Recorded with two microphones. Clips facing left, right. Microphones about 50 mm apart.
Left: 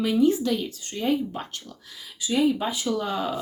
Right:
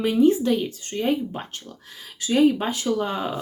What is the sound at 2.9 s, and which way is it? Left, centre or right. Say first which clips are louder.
Speech: right 2 dB; right.